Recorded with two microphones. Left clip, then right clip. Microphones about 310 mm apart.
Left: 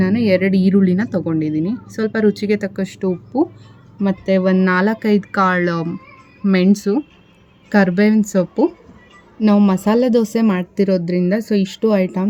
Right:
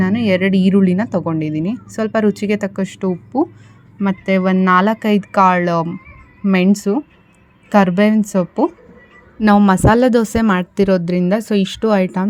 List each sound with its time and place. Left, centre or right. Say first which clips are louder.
0.0 s speech: even; centre
0.7 s speech: right 1 dB; right
0.9 s speech: right 1 dB; centre
9.4 s speech: right 4 dB; right